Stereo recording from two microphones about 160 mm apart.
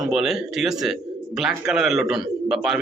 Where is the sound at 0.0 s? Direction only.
5° right (ahead or behind).